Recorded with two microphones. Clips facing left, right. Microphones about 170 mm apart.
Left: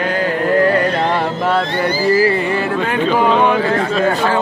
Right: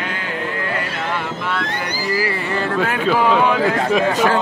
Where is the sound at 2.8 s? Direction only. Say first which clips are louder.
Left 1 dB; 5° right (ahead or behind).